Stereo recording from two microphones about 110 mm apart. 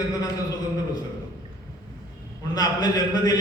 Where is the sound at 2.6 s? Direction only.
35° left (ahead or behind).